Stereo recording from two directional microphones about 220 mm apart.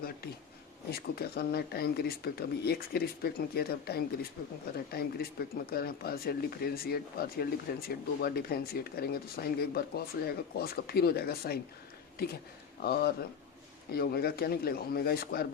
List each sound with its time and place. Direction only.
0.9 s speech: 45° left (ahead or behind)